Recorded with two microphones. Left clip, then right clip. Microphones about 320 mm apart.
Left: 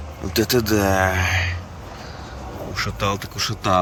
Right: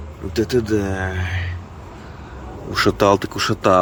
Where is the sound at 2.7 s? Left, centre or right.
Centre.